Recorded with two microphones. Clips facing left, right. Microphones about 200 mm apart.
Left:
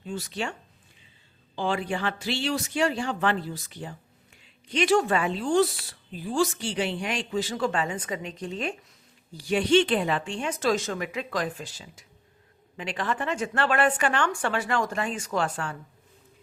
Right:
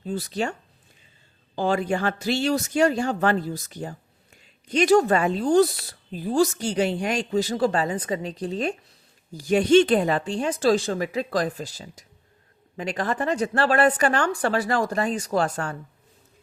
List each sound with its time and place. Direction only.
0.0 s speech: 35° right (ahead or behind)
1.5 s speech: 45° right (ahead or behind)